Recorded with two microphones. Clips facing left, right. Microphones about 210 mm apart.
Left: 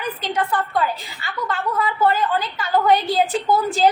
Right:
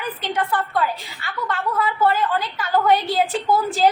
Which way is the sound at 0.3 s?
Centre (ahead or behind).